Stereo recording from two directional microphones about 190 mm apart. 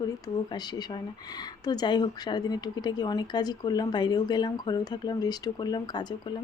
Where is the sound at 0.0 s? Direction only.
20° left (ahead or behind).